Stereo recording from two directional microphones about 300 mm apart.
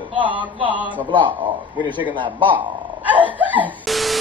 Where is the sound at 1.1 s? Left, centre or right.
Centre.